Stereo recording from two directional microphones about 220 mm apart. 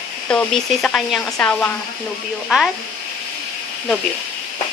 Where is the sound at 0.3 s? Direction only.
5° left (ahead or behind).